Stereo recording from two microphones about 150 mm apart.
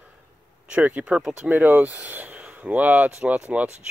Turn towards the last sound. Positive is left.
turn(degrees=-10)  # may be behind; listen again after turning